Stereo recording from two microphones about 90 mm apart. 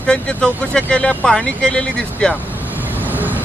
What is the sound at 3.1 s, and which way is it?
Train, 20° right (ahead or behind).